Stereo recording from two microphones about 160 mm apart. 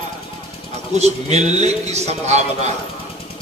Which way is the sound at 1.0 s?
45° right (ahead or behind).